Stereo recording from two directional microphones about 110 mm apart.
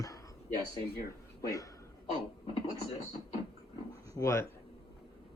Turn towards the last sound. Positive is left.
turn(degrees=30)  # may be behind; listen again after turning